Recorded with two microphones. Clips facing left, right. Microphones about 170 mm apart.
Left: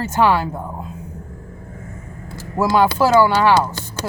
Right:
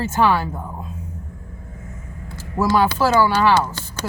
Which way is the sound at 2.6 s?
15° left (ahead or behind).